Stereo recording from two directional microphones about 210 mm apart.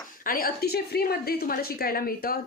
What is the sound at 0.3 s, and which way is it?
A woman's voice, 45° left (ahead or behind).